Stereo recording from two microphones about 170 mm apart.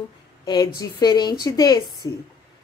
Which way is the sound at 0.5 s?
25° left (ahead or behind).